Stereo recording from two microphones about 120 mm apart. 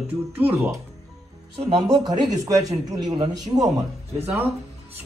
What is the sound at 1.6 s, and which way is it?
Speech, 50° right (ahead or behind).